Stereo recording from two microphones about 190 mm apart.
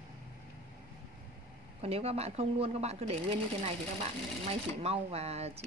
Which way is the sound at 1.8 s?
30° right (ahead or behind).